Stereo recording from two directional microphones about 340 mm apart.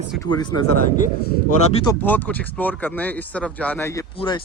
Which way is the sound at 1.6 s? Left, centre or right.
Centre.